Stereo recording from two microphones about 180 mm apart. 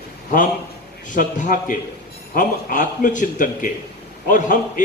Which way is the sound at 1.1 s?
45° left (ahead or behind).